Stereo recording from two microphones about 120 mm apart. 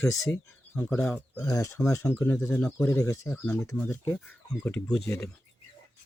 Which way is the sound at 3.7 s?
10° left (ahead or behind).